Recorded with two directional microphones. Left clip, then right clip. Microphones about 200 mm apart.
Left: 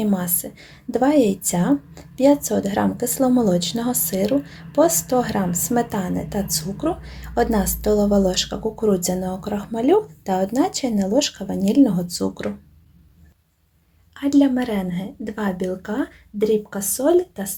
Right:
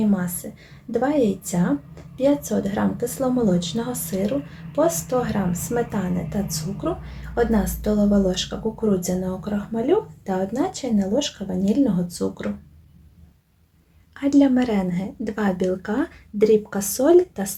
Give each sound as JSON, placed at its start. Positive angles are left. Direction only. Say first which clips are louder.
{"t": 0.4, "sound": "a woman's voice", "louder": "left 2 dB", "side_deg": 45}
{"t": 14.2, "sound": "a woman's voice", "louder": "even", "side_deg": 0}